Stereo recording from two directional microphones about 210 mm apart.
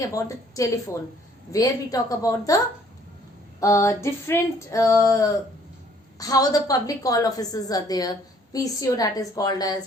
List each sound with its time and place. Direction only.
0.0 s a woman's voice: 15° left (ahead or behind)
3.6 s a woman's voice: 15° left (ahead or behind)